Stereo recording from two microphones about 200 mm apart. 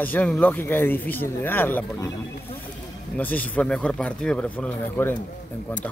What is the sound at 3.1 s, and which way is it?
A man's voice, 5° left (ahead or behind).